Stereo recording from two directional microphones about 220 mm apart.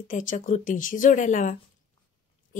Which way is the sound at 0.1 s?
35° left (ahead or behind).